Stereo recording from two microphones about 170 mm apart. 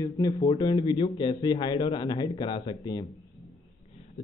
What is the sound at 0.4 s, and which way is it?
A man's voice, 25° left (ahead or behind).